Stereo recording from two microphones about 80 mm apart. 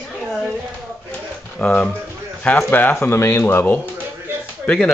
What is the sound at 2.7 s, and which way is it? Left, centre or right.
Speech, left.